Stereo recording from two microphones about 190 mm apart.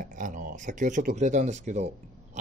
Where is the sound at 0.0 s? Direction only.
45° right (ahead or behind).